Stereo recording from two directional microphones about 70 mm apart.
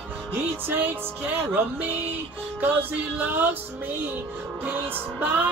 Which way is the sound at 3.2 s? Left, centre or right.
Right.